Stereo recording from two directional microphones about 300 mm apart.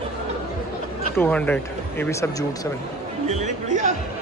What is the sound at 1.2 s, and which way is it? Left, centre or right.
Speech, centre.